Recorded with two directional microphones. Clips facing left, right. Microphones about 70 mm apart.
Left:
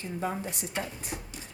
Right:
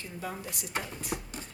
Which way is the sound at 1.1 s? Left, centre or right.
Right.